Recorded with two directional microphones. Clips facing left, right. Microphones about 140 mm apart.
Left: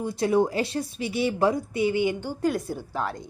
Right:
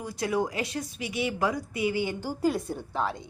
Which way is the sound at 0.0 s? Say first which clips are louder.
Left 6 dB; 25° left (ahead or behind).